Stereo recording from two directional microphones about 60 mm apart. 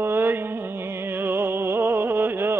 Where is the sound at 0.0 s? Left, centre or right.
Right.